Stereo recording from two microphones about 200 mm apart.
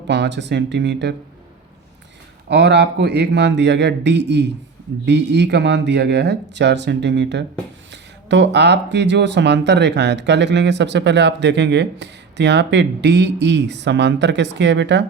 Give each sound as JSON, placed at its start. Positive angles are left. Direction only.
{"t": 0.1, "sound": "speech", "side_deg": -60}
{"t": 2.5, "sound": "speech", "side_deg": -55}